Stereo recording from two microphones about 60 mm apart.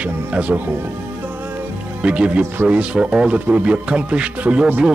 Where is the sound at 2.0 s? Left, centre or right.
Centre.